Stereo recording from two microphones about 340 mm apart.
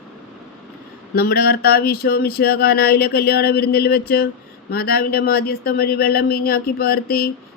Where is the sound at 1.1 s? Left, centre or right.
Left.